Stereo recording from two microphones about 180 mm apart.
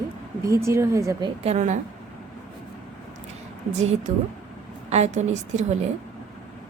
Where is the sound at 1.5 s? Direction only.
40° right (ahead or behind).